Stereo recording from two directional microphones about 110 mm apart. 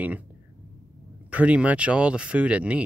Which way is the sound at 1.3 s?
10° right (ahead or behind).